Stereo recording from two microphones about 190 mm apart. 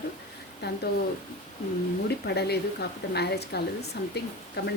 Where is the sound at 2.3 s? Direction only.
60° left (ahead or behind).